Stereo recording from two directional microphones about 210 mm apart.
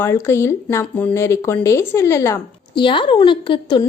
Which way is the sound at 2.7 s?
25° left (ahead or behind).